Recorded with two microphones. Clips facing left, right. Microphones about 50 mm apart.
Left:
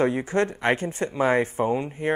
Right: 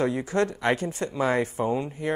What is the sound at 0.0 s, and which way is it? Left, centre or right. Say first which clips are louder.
Speech: left 2 dB; left.